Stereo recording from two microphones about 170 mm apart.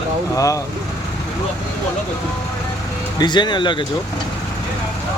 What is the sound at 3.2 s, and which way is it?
Speech, 25° left (ahead or behind).